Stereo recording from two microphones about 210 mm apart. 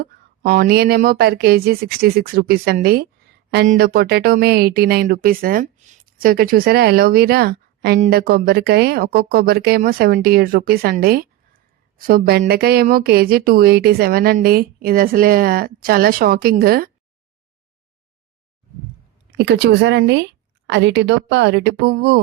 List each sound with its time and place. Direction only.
0.0 s speech: 45° right (ahead or behind)
19.4 s a woman's voice: 55° right (ahead or behind)